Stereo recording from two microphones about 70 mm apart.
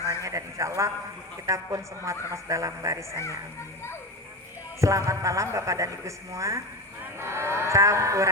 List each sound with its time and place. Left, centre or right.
0.1 s sheep: right
1.5 s a woman's voice: right
4.8 s a woman's voice: right